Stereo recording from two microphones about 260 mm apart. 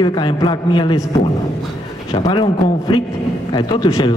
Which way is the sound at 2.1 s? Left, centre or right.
Centre.